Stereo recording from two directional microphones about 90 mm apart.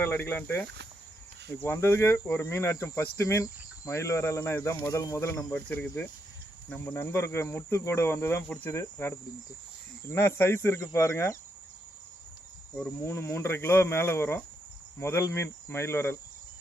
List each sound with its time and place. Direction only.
0.0 s speech: 25° left (ahead or behind)
1.6 s speech: 30° left (ahead or behind)
5.5 s speech: 20° left (ahead or behind)
12.8 s speech: 25° left (ahead or behind)